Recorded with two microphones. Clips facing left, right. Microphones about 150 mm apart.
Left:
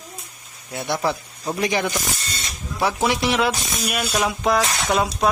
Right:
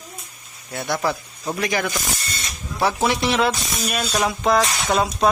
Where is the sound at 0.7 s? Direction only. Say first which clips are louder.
Even; 20° left (ahead or behind).